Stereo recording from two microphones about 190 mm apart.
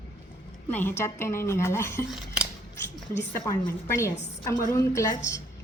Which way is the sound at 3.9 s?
15° left (ahead or behind).